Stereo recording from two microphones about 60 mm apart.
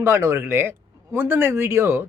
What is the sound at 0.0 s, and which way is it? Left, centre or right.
Speech, right.